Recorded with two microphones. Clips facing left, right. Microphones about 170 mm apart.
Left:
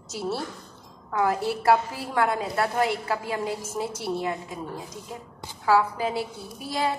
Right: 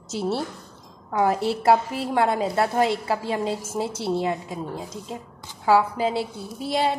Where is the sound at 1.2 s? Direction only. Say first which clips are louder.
Right 2 dB; 25° right (ahead or behind).